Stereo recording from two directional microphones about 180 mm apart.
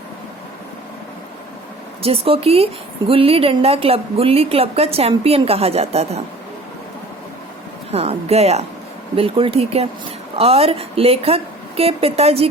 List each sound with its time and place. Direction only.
2.0 s a woman's voice: 35° right (ahead or behind)
7.9 s a woman's voice: 35° right (ahead or behind)